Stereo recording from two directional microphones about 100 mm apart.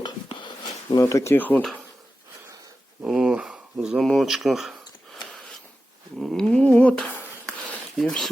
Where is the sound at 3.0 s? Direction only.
5° right (ahead or behind).